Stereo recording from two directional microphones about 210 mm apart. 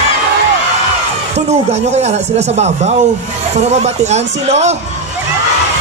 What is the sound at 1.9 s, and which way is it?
A man's voice, 30° right (ahead or behind).